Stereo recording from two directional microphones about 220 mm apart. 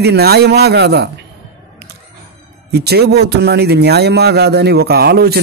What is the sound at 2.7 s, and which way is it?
A man's voice, 45° right (ahead or behind).